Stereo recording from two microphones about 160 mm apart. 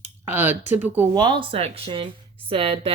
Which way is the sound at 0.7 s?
10° right (ahead or behind).